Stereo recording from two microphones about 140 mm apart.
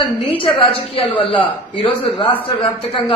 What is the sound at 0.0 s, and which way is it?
A woman's voice, 40° left (ahead or behind).